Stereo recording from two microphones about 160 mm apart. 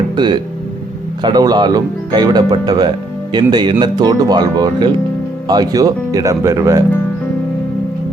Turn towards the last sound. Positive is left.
turn(degrees=-20)  # may be behind; listen again after turning